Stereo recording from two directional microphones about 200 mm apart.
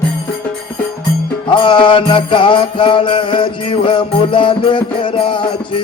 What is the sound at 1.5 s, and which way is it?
Music, 25° left (ahead or behind).